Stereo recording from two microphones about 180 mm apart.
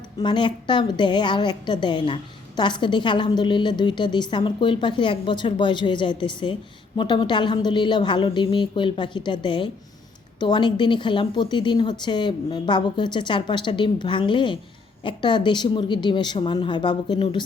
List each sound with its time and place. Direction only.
0.2 s a woman's voice: 25° left (ahead or behind)